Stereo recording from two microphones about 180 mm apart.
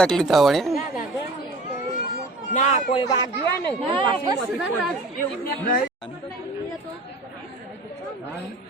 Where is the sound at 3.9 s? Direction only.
25° right (ahead or behind).